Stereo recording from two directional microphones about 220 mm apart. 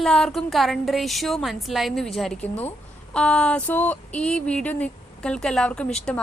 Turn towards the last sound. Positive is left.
turn(degrees=5)  # may be behind; listen again after turning